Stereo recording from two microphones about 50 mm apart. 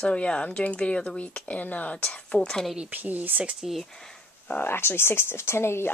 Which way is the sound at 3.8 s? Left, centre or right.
Centre.